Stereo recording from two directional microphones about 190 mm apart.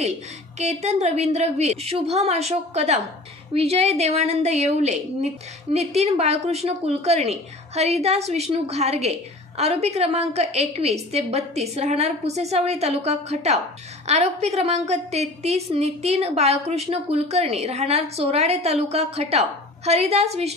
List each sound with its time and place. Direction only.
0.6 s a woman's voice: 35° right (ahead or behind)